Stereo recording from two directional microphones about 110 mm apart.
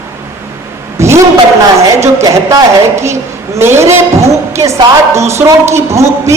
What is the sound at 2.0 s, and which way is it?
A woman's voice, 25° right (ahead or behind).